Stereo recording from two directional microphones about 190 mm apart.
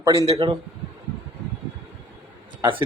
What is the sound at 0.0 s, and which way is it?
Speech, 15° right (ahead or behind).